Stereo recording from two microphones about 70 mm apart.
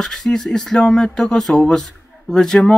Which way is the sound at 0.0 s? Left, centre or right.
Centre.